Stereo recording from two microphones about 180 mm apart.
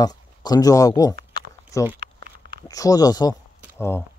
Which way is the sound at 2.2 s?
60° right (ahead or behind).